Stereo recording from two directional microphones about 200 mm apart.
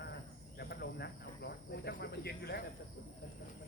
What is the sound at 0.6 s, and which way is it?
Speech, 55° left (ahead or behind).